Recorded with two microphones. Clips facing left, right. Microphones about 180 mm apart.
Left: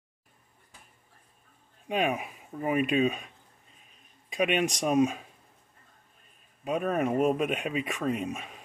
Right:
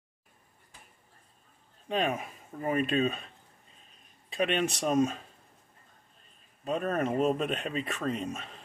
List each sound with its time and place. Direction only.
1.9 s speech: 10° left (ahead or behind)
4.3 s speech: 10° left (ahead or behind)
6.6 s speech: 10° left (ahead or behind)